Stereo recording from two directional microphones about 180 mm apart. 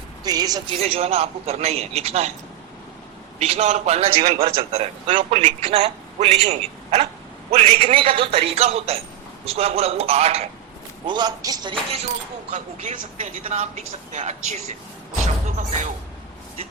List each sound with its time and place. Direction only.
0.3 s speech: 20° right (ahead or behind)
0.8 s a man's voice: 35° right (ahead or behind)
3.3 s a man's voice: 35° right (ahead or behind)
11.0 s speech: 25° right (ahead or behind)
12.5 s a man's voice: 45° right (ahead or behind)
15.4 s speech: 40° right (ahead or behind)